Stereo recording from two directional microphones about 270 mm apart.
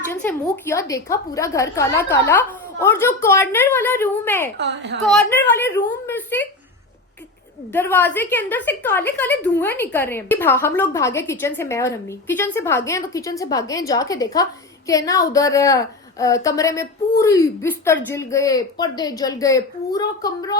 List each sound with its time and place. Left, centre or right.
0.1 s a woman's voice: centre
4.5 s a woman's voice: right
5.0 s a woman's voice: centre
7.7 s a woman's voice: centre